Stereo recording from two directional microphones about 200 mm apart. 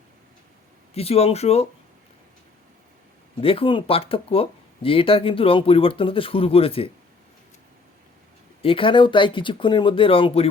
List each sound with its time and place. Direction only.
0.9 s speech: 30° left (ahead or behind)
3.4 s speech: 25° left (ahead or behind)
8.6 s speech: 25° left (ahead or behind)